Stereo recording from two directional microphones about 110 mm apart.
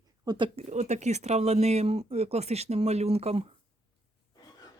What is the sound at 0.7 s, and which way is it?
Speech, 90° right.